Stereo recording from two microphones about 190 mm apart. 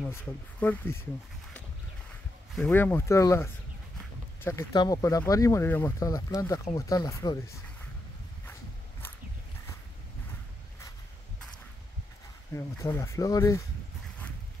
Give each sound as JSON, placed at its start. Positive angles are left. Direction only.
{"t": 0.0, "sound": "speech", "side_deg": 10}
{"t": 2.5, "sound": "speech", "side_deg": 10}
{"t": 12.5, "sound": "speech", "side_deg": 15}